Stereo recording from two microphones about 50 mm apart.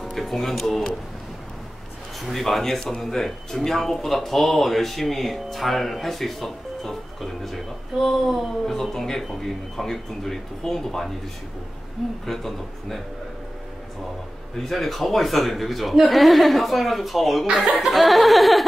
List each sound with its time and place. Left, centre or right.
0.0 s speech: centre
2.2 s speech: centre
12.3 s speech: centre
14.6 s speech: centre